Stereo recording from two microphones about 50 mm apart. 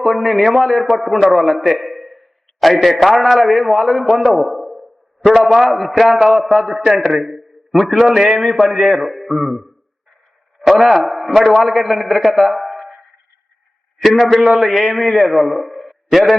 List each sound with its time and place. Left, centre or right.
0.0 s a man's voice: centre
14.0 s a man's voice: centre